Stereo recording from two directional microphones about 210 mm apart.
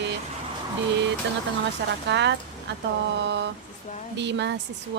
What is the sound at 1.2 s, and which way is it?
Speech, 55° right (ahead or behind).